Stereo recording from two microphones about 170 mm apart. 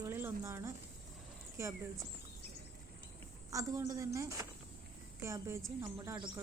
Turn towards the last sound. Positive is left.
turn(degrees=-15)  # may be behind; listen again after turning